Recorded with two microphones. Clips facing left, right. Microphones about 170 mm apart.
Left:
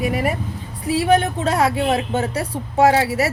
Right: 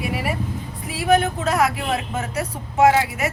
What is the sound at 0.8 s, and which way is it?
A woman's voice, 30° left (ahead or behind).